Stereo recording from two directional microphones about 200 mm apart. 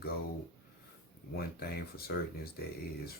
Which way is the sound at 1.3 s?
50° left (ahead or behind).